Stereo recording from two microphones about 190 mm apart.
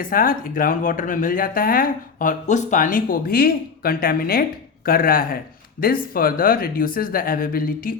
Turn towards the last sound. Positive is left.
turn(degrees=50)  # may be behind; listen again after turning